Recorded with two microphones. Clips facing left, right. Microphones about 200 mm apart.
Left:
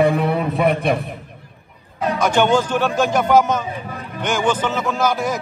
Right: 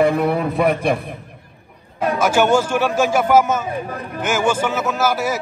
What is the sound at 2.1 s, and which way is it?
A man's voice, 5° right (ahead or behind).